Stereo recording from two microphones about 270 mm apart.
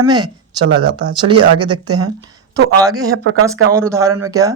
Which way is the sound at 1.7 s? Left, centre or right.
Right.